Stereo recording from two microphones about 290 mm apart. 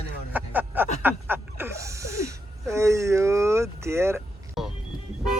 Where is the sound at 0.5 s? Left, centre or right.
Centre.